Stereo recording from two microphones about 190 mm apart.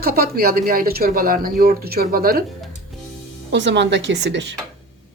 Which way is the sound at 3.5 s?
65° right (ahead or behind).